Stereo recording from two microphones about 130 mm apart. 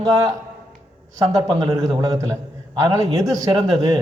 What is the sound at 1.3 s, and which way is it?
A man's voice, 35° right (ahead or behind).